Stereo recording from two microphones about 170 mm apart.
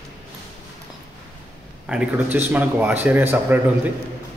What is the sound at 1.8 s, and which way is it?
A man's voice, 5° right (ahead or behind).